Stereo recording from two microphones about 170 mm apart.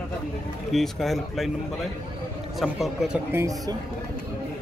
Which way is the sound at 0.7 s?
Centre (ahead or behind).